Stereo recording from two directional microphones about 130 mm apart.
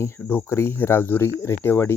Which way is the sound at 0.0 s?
15° left (ahead or behind).